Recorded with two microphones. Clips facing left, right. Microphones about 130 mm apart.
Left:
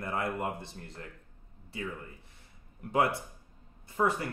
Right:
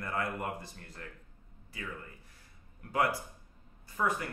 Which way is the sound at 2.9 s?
25° left (ahead or behind).